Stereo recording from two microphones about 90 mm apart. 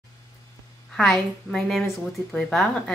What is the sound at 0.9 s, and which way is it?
A woman's voice, 5° left (ahead or behind).